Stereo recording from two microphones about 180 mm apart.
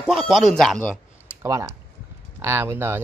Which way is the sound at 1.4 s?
15° right (ahead or behind).